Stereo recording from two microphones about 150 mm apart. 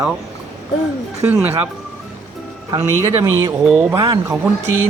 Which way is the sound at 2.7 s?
20° right (ahead or behind).